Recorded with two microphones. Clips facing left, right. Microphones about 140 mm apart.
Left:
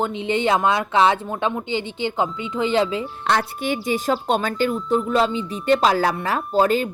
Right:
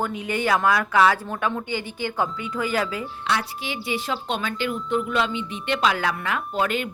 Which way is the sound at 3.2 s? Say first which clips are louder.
Left 5 dB; 50° left (ahead or behind).